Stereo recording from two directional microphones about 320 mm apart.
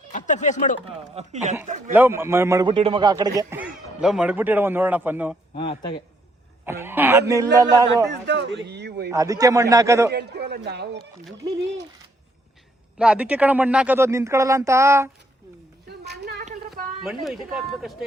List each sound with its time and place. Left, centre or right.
0.1 s speech: left
0.9 s speech: right
1.9 s a man's voice: centre
5.5 s speech: centre
6.7 s a man's voice: centre
8.3 s a sound: right
9.1 s a man's voice: centre
10.1 s a man's voice: right
13.0 s a man's voice: centre
15.9 s a sound: right
17.0 s speech: centre